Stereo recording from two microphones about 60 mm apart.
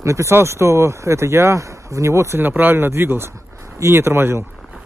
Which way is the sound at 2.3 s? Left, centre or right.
Right.